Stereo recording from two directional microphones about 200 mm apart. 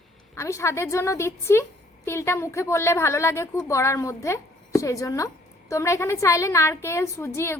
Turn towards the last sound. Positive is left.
turn(degrees=15)  # may be behind; listen again after turning